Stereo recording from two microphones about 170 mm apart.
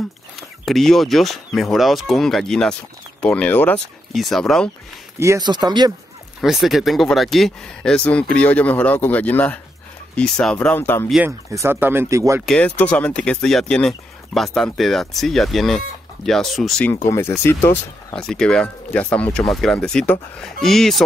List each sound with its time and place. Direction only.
0.7 s speech: centre (ahead or behind)
5.2 s speech: 20° right (ahead or behind)
6.4 s speech: centre (ahead or behind)
11.2 s speech: 15° right (ahead or behind)
12.4 s speech: 10° left (ahead or behind)
16.9 s speech: 15° left (ahead or behind)